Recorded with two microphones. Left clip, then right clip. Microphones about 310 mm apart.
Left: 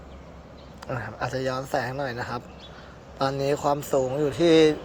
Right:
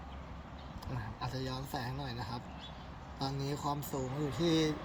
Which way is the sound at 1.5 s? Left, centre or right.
Left.